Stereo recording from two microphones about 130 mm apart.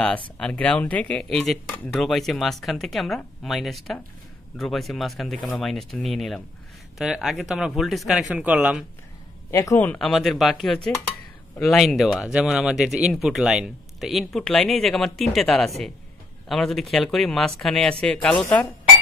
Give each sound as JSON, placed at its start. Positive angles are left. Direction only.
{"t": 0.4, "sound": "speech", "side_deg": 10}
{"t": 9.5, "sound": "a man's voice", "side_deg": 20}
{"t": 9.9, "sound": "speech", "side_deg": 0}